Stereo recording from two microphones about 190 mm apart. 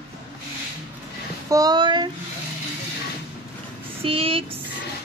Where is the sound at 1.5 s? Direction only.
20° right (ahead or behind).